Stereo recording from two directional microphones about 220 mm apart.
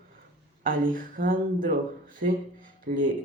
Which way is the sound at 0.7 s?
40° right (ahead or behind).